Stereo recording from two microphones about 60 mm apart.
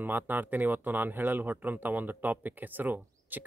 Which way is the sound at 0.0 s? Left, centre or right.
Right.